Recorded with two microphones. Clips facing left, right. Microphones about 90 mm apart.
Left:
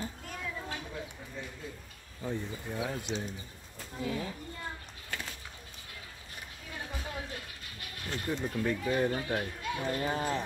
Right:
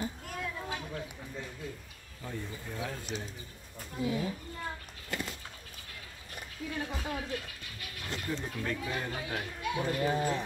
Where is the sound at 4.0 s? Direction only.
20° right (ahead or behind).